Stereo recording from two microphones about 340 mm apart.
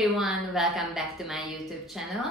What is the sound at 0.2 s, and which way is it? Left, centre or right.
A woman's voice, centre.